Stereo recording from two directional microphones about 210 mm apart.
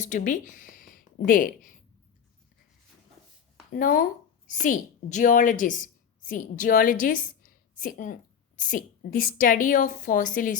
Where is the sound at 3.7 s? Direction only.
40° left (ahead or behind).